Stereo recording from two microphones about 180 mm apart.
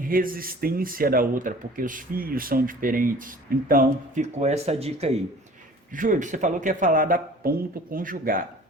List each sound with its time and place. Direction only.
0.0 s speech: 50° right (ahead or behind); by 5.1 s 35° right (ahead or behind)
5.9 s speech: 45° right (ahead or behind)